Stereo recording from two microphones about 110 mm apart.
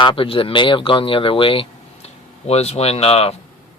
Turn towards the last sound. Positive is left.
turn(degrees=65)  # may be behind; listen again after turning